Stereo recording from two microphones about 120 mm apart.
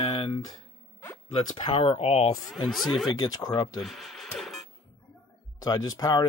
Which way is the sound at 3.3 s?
35° left (ahead or behind).